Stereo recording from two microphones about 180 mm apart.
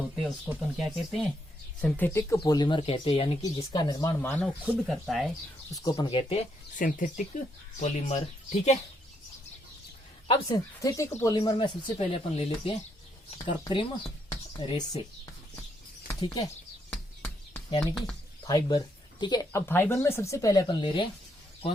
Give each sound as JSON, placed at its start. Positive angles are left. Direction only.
{"t": 0.2, "sound": "speech", "side_deg": -5}
{"t": 1.8, "sound": "speech", "side_deg": 10}
{"t": 2.4, "sound": "speech", "side_deg": 25}
{"t": 4.6, "sound": "speech", "side_deg": 0}
{"t": 5.7, "sound": "speech", "side_deg": 20}
{"t": 6.7, "sound": "speech", "side_deg": 45}
{"t": 10.2, "sound": "speech", "side_deg": 30}
{"t": 10.8, "sound": "speech", "side_deg": 15}
{"t": 16.9, "sound": "a sound", "side_deg": 5}
{"t": 17.7, "sound": "speech", "side_deg": 20}